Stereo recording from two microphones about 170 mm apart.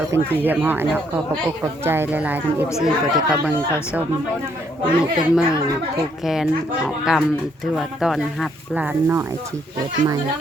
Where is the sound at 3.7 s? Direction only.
15° left (ahead or behind).